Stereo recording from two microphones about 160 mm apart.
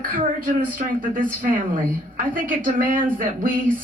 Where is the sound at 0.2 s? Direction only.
55° right (ahead or behind).